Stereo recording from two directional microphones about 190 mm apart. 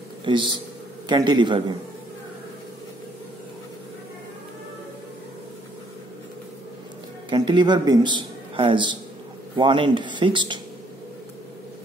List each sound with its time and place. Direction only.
0.2 s a man's voice: 25° right (ahead or behind)
7.2 s a man's voice: 25° right (ahead or behind)